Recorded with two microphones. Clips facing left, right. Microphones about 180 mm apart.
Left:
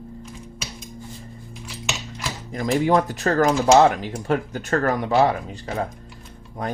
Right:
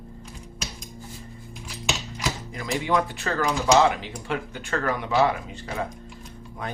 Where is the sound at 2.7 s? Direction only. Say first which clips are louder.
Left 5 dB; 40° left (ahead or behind).